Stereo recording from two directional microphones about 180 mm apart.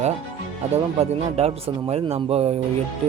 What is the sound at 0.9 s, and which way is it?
Speech, 35° right (ahead or behind).